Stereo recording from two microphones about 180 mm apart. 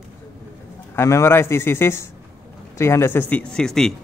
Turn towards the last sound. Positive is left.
turn(degrees=5)  # may be behind; listen again after turning